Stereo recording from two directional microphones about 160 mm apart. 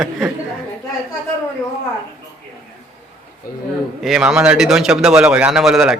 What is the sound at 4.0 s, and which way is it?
A man's voice, centre (ahead or behind).